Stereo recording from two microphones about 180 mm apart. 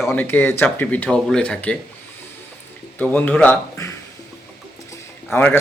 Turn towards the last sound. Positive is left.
turn(degrees=10)  # may be behind; listen again after turning